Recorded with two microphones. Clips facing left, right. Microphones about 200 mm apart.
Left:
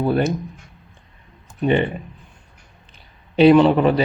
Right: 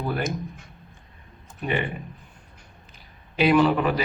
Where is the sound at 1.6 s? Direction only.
30° left (ahead or behind).